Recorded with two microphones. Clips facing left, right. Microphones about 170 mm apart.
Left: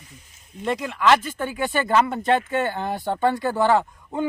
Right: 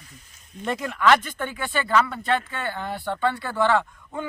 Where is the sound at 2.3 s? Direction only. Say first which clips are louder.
Left 4 dB; 45° left (ahead or behind).